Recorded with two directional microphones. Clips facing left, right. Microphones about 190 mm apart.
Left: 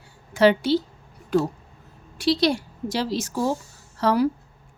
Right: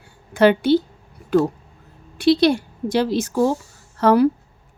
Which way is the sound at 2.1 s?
60° right (ahead or behind).